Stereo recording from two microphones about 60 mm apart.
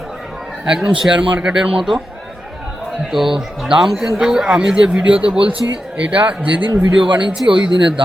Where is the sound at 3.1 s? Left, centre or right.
Centre; by 6.5 s right.